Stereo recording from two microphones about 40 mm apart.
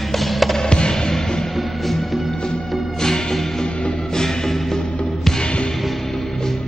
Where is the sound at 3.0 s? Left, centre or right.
Centre.